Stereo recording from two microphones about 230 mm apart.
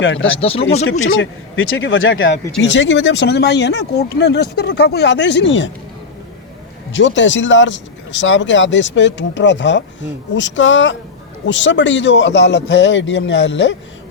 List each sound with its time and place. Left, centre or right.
0.0 s speech: left
0.3 s speech: left
1.1 s speech: left
6.9 s speech: left